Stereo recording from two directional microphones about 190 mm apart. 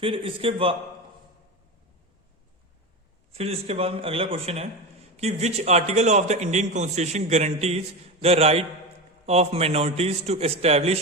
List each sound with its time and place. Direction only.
0.0 s a man's voice: 30° right (ahead or behind)
3.3 s a man's voice: 35° right (ahead or behind)